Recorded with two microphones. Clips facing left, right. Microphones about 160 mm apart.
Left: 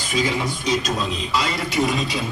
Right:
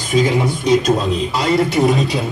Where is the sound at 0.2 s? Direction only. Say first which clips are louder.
Right 7 dB; 55° right (ahead or behind).